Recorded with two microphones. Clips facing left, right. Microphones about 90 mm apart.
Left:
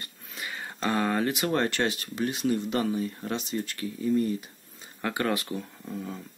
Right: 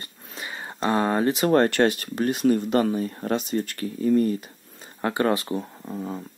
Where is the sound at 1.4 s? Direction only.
50° right (ahead or behind).